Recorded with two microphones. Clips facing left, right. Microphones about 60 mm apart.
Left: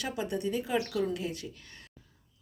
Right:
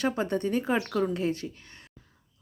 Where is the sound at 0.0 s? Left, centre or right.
Right.